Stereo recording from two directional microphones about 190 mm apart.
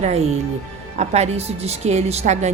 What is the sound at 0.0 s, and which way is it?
A woman's voice, 35° right (ahead or behind).